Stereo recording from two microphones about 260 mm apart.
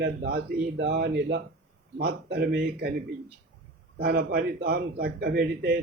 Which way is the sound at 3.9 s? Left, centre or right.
Right.